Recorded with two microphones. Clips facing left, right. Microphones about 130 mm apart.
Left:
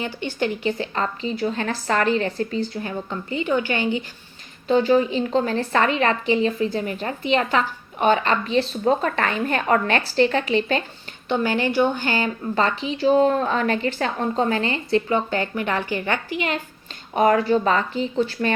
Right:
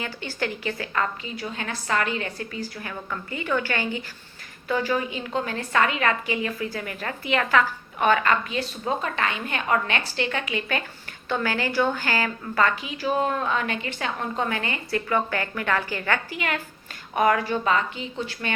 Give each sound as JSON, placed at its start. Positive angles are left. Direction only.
{"t": 0.0, "sound": "a woman's voice", "side_deg": 20}